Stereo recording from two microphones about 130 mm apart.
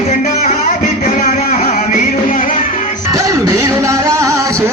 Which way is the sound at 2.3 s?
80° left.